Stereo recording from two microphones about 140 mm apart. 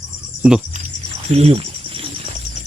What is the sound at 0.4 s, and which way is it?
Speech, 5° right (ahead or behind).